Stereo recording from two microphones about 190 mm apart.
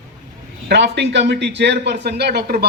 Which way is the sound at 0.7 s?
65° right (ahead or behind).